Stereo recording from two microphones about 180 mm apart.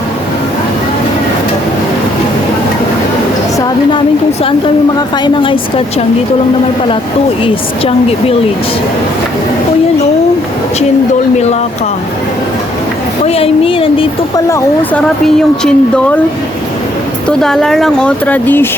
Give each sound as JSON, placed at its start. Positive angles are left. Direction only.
{"t": 4.9, "sound": "speech", "side_deg": 25}
{"t": 7.4, "sound": "speech", "side_deg": 30}
{"t": 13.2, "sound": "speech", "side_deg": 35}
{"t": 14.5, "sound": "speech", "side_deg": 5}
{"t": 17.2, "sound": "speech", "side_deg": 5}